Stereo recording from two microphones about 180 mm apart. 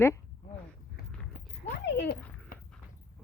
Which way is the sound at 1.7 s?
75° left (ahead or behind).